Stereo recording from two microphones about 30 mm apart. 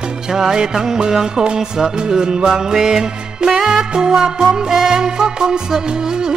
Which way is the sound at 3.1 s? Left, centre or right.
Right.